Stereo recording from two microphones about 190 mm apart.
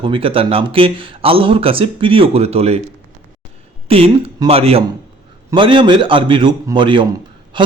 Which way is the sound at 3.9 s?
30° right (ahead or behind).